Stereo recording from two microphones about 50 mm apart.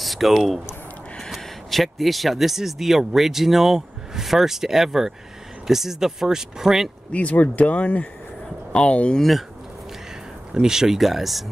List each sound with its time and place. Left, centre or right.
0.0 s speech: centre
7.1 s speech: left
10.5 s speech: centre